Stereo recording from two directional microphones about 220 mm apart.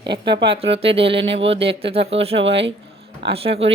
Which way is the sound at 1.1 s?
55° right (ahead or behind).